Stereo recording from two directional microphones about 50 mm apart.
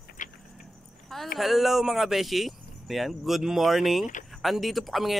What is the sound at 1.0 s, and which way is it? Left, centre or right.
Speech, centre.